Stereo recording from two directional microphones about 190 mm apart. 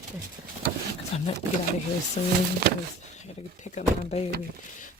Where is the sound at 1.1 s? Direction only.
35° left (ahead or behind).